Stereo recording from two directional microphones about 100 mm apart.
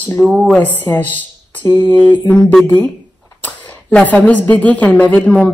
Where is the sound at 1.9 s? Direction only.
20° left (ahead or behind).